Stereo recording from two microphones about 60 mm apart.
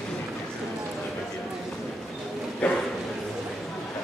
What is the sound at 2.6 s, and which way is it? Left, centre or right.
Bow-wow, left.